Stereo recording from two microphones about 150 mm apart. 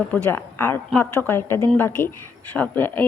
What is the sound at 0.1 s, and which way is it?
A woman's voice, 15° left (ahead or behind).